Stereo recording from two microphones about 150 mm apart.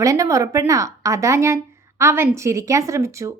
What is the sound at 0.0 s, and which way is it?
Speech, 20° right (ahead or behind).